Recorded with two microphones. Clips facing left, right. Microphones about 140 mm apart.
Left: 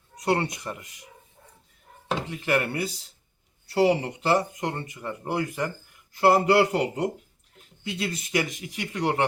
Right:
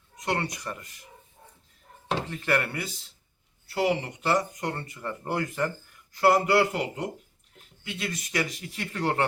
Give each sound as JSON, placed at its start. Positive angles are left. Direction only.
{"t": 0.3, "sound": "speech", "side_deg": 30}
{"t": 2.5, "sound": "speech", "side_deg": 20}
{"t": 3.7, "sound": "speech", "side_deg": 30}
{"t": 6.1, "sound": "speech", "side_deg": 25}